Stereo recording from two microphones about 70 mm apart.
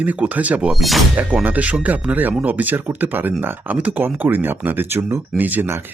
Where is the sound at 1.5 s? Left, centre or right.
Right.